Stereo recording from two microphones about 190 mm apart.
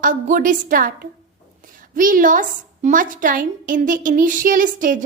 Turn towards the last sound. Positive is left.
turn(degrees=-45)  # may be behind; listen again after turning